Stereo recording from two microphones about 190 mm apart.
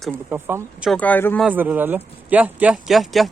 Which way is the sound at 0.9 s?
10° left (ahead or behind).